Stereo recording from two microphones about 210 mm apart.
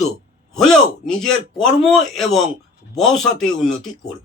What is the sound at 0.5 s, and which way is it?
A man's voice, centre (ahead or behind).